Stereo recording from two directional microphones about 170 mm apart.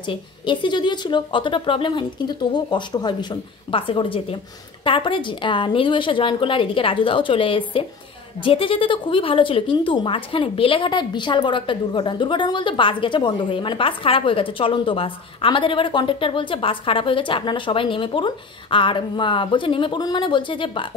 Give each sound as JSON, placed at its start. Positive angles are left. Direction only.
{"t": 0.0, "sound": "a woman's voice", "side_deg": 30}